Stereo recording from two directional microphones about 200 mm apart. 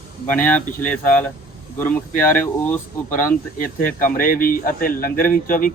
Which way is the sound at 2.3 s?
10° left (ahead or behind).